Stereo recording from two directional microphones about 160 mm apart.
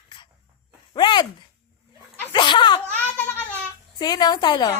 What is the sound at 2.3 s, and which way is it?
Laughter, 30° left (ahead or behind).